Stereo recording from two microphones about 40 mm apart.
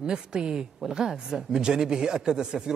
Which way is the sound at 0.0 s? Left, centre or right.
Right.